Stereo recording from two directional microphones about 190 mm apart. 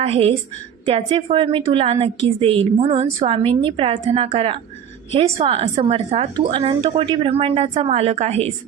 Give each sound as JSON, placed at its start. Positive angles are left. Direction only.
{"t": 0.0, "sound": "a woman's voice", "side_deg": -30}